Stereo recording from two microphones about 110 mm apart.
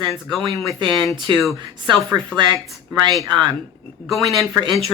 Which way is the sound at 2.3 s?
40° right (ahead or behind).